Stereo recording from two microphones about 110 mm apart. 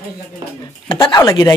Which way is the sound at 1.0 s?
30° left (ahead or behind).